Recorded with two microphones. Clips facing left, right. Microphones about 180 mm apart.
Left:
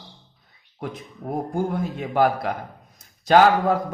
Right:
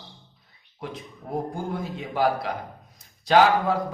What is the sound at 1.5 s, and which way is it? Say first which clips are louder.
A man's voice: left 6 dB; 50° left (ahead or behind).